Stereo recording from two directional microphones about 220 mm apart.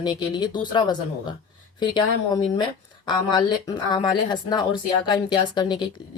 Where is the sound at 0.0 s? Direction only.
20° left (ahead or behind).